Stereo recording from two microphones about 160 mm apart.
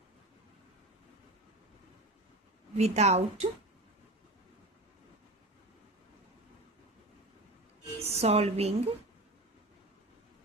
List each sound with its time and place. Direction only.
2.7 s a woman's voice: 45° right (ahead or behind)
8.1 s a woman's voice: 40° right (ahead or behind)